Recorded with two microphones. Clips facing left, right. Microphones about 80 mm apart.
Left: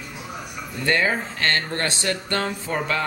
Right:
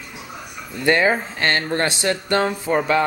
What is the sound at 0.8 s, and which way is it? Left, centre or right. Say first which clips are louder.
Speech: right 4 dB; centre.